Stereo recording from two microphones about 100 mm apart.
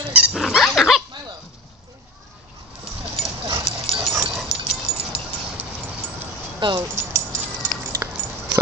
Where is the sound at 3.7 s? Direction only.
90° left.